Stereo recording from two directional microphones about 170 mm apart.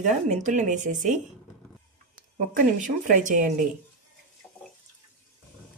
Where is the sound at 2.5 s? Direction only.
50° right (ahead or behind).